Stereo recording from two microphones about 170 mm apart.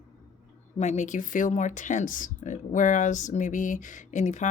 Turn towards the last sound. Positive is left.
turn(degrees=45)  # may be behind; listen again after turning